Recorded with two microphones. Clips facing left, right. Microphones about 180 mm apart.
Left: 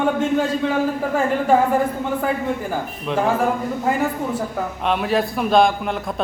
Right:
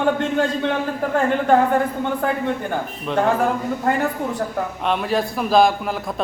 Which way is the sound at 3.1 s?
Centre (ahead or behind).